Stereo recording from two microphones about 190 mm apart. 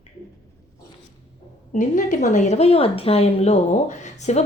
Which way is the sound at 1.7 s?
40° left (ahead or behind).